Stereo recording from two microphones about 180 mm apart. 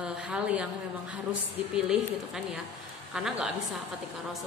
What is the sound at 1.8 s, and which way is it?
A woman's voice, 5° right (ahead or behind).